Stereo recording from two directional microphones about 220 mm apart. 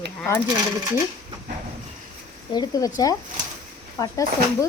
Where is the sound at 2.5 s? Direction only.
15° left (ahead or behind).